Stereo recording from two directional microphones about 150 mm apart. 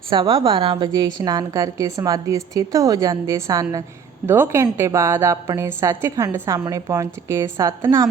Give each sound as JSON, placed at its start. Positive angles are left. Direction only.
{"t": 0.1, "sound": "a woman's voice", "side_deg": -35}